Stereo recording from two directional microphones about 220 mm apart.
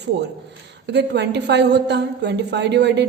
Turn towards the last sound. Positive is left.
turn(degrees=-50)  # may be behind; listen again after turning